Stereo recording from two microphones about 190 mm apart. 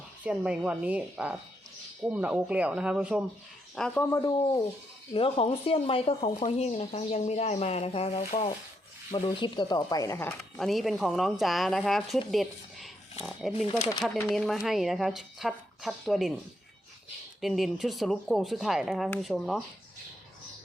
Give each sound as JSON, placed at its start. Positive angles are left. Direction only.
{"t": 0.2, "sound": "a woman's voice", "side_deg": -5}
{"t": 3.8, "sound": "speech", "side_deg": 10}
{"t": 5.1, "sound": "speech", "side_deg": 30}
{"t": 10.6, "sound": "a woman's voice", "side_deg": 0}
{"t": 13.7, "sound": "speech", "side_deg": 30}
{"t": 14.3, "sound": "a woman's voice", "side_deg": 0}
{"t": 17.4, "sound": "a woman's voice", "side_deg": 0}